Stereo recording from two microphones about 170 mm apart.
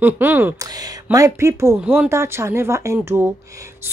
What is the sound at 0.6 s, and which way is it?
A woman's voice, 20° right (ahead or behind).